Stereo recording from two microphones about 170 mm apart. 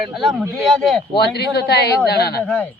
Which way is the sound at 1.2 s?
75° left (ahead or behind).